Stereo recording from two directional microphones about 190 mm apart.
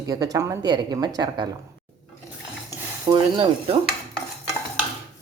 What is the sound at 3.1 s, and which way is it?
Speech, 25° right (ahead or behind).